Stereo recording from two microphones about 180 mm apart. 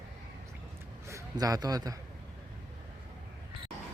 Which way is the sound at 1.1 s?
20° right (ahead or behind).